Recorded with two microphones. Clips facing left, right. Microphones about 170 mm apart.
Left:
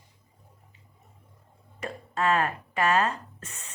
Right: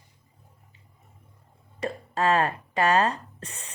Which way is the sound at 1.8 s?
35° right (ahead or behind).